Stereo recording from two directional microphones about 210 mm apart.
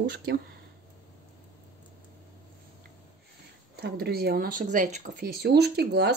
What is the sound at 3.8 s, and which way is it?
Speech, 50° right (ahead or behind).